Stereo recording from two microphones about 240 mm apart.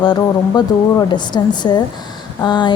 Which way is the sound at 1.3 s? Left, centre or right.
Centre.